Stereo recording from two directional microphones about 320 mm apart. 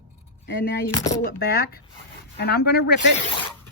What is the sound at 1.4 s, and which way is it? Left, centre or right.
A woman's voice, left.